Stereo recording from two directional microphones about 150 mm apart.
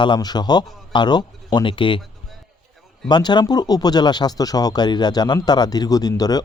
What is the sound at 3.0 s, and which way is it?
Speech, 30° left (ahead or behind).